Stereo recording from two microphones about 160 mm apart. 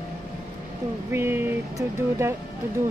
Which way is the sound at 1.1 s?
15° right (ahead or behind).